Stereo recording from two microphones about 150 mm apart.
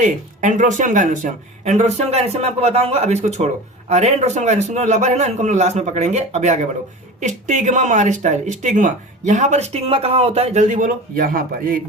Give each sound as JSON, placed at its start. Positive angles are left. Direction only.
{"t": 0.0, "sound": "speech", "side_deg": -55}